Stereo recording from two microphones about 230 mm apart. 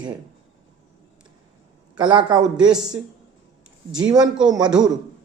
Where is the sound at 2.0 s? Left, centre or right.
Centre.